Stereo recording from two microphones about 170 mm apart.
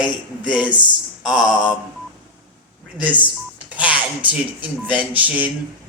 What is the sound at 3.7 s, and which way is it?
Speech, 10° right (ahead or behind).